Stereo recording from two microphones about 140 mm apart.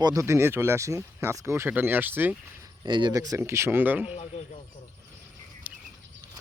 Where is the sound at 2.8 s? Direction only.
35° right (ahead or behind); by 4.2 s 10° right (ahead or behind).